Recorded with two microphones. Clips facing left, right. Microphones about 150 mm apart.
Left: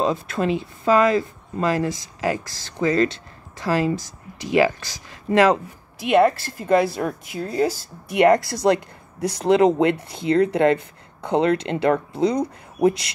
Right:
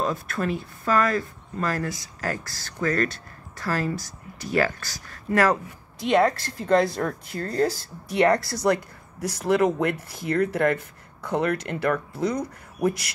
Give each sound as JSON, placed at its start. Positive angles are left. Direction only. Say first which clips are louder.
{"t": 0.0, "sound": "speech", "louder": "left 5 dB", "side_deg": 20}
{"t": 5.9, "sound": "a woman's voice", "louder": "left 4 dB", "side_deg": 5}